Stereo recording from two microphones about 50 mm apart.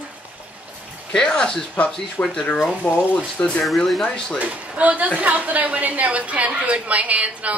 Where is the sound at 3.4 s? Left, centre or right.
Left.